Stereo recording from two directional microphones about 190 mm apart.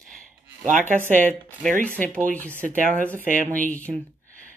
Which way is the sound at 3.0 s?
10° left (ahead or behind).